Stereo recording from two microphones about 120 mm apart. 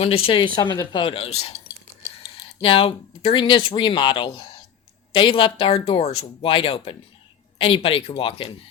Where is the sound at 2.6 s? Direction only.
50° left (ahead or behind).